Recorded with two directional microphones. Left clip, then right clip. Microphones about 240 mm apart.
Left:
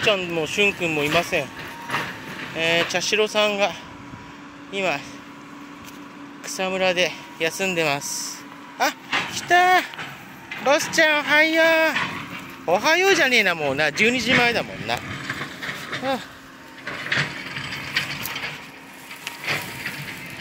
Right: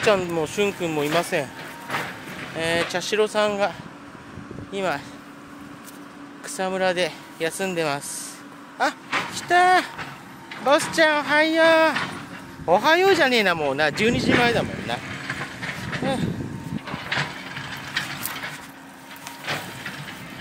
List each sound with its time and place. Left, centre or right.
0.0 s speech: centre
1.6 s a sound: left
2.5 s speech: centre
4.7 s speech: centre
6.4 s speech: centre
11.9 s dog: centre
12.6 s speech: centre
15.0 s a sound: left
16.8 s ratchet: left
19.4 s a sound: left